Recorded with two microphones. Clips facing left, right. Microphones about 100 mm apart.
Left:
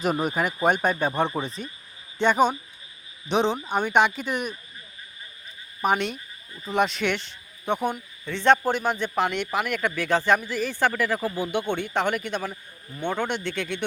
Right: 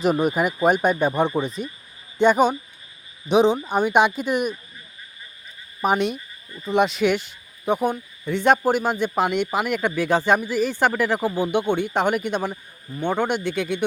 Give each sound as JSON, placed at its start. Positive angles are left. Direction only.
{"t": 0.0, "sound": "speech", "side_deg": 0}
{"t": 1.5, "sound": "speech", "side_deg": 30}
{"t": 2.2, "sound": "a man's voice", "side_deg": -5}
{"t": 5.8, "sound": "a man's voice", "side_deg": -15}
{"t": 6.7, "sound": "a man's voice", "side_deg": -5}